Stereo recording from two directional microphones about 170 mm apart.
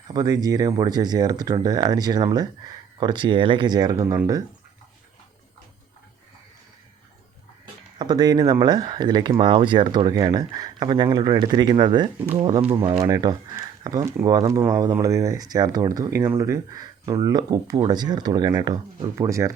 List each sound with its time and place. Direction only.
0.1 s speech: 25° right (ahead or behind)
7.9 s speech: 25° right (ahead or behind)
13.1 s speech: 20° right (ahead or behind)